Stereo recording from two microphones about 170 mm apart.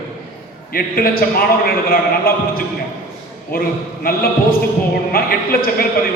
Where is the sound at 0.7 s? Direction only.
60° left (ahead or behind).